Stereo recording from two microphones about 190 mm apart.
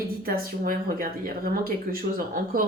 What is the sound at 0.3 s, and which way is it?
A woman's voice, 50° right (ahead or behind).